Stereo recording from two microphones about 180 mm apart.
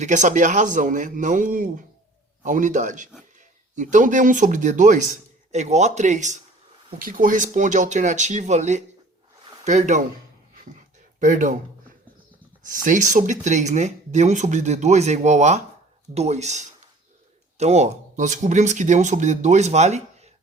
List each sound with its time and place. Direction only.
0.0 s speech: 40° right (ahead or behind)
11.2 s speech: 45° right (ahead or behind)
12.6 s speech: 45° right (ahead or behind)